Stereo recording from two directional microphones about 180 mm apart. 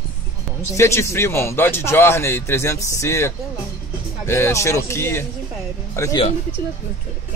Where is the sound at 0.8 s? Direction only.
15° left (ahead or behind).